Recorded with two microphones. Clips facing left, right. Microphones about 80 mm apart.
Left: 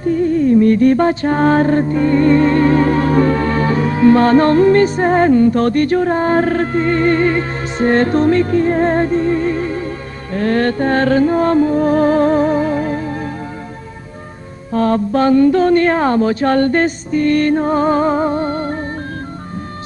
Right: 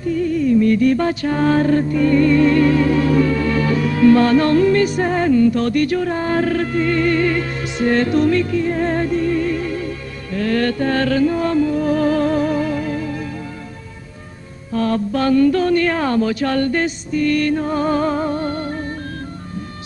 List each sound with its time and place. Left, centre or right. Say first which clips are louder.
0.0 s music: left 4 dB; left
14.7 s speech: left 4 dB; left